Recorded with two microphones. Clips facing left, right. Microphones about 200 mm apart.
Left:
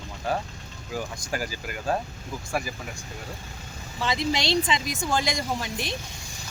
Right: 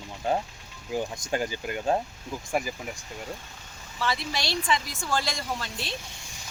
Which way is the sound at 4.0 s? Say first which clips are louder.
Left 4 dB; 20° left (ahead or behind).